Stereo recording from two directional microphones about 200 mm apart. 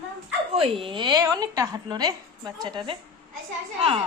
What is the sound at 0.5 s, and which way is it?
A woman's voice, 30° right (ahead or behind).